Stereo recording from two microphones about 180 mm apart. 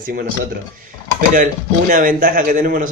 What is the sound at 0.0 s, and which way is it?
Speech, 50° right (ahead or behind).